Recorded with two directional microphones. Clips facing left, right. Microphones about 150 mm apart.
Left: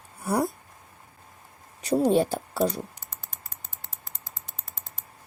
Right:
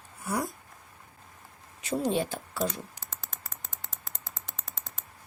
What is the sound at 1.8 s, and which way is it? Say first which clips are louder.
Speech: left 7 dB; 35° left (ahead or behind).